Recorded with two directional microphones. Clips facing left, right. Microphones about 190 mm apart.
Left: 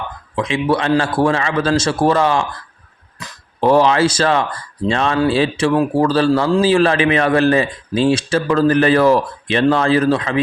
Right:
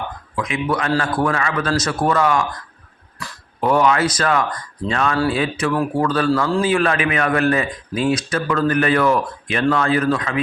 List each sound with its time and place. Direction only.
0.3 s a man's voice: 30° left (ahead or behind)